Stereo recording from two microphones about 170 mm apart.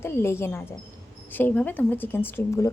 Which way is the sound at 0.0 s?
15° left (ahead or behind).